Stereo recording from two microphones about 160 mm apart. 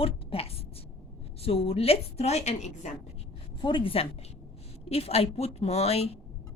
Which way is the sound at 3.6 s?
30° left (ahead or behind).